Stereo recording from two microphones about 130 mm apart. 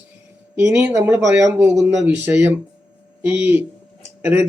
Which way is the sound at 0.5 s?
15° right (ahead or behind).